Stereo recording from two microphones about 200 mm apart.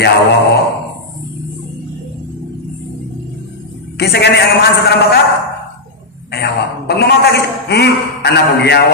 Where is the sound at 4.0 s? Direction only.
55° left (ahead or behind).